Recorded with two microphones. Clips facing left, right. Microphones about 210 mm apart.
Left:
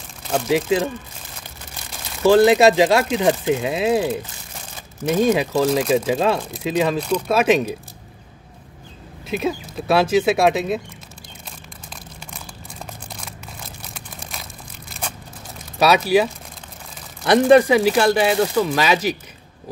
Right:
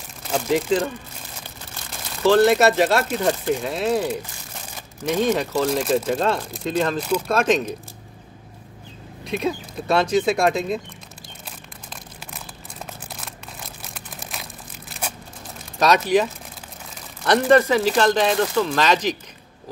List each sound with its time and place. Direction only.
0.3 s speech: 5° left (ahead or behind)
2.2 s speech: 10° left (ahead or behind)
7.0 s speech: 5° right (ahead or behind)
7.3 s speech: 10° left (ahead or behind)
9.2 s speech: 5° left (ahead or behind)
13.9 s crumpling: 5° right (ahead or behind)
14.9 s a sound: 5° right (ahead or behind)
15.8 s speech: 10° left (ahead or behind)